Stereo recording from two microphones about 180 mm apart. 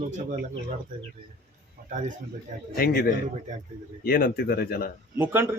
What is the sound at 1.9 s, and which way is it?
Speech, 45° right (ahead or behind).